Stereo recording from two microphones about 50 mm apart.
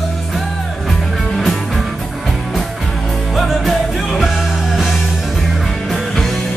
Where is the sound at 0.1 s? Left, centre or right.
Centre.